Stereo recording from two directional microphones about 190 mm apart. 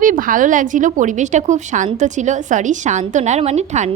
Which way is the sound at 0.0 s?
45° right (ahead or behind).